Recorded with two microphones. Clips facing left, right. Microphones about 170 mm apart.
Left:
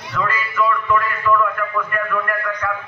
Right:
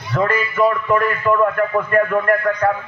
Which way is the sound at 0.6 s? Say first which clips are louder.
Right 2 dB; 45° right (ahead or behind).